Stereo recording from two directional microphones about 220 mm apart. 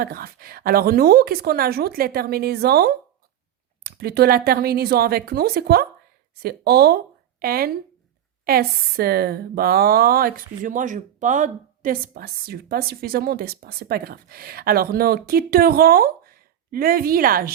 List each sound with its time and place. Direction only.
0.0 s speech: 45° right (ahead or behind)